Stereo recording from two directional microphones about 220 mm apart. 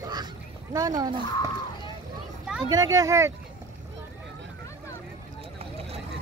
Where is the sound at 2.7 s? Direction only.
15° right (ahead or behind).